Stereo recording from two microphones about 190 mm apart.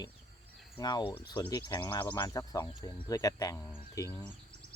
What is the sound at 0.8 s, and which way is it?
Speech, 20° left (ahead or behind).